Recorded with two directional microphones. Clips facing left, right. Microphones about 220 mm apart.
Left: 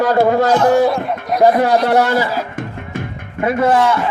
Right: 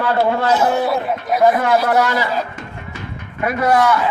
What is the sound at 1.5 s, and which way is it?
Speech, 35° left (ahead or behind).